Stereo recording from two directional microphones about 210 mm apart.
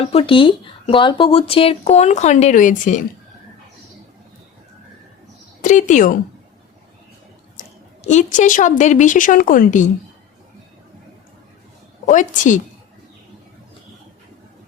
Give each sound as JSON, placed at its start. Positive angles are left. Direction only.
{"t": 0.0, "sound": "speech", "side_deg": 25}
{"t": 5.6, "sound": "speech", "side_deg": 35}
{"t": 7.6, "sound": "a sound", "side_deg": 40}
{"t": 8.0, "sound": "speech", "side_deg": 35}
{"t": 12.0, "sound": "speech", "side_deg": 35}